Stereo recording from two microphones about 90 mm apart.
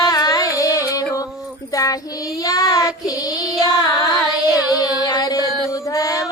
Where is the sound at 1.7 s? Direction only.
40° left (ahead or behind).